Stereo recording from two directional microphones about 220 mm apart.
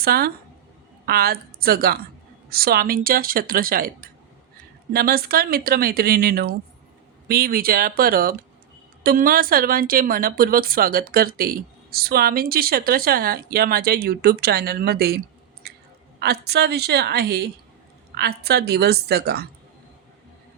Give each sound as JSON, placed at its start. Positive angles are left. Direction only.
{"t": 0.0, "sound": "a woman's voice", "side_deg": -45}
{"t": 15.6, "sound": "a sound", "side_deg": -45}
{"t": 16.2, "sound": "speech", "side_deg": -45}